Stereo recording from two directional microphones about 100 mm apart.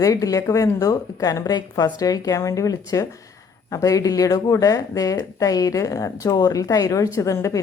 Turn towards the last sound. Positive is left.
turn(degrees=30)  # may be behind; listen again after turning